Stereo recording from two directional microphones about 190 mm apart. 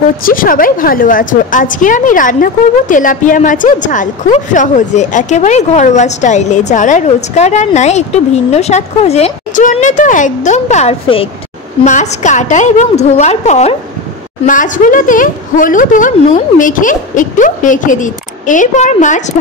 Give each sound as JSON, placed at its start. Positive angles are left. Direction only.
{"t": 0.2, "sound": "a woman's voice", "side_deg": 45}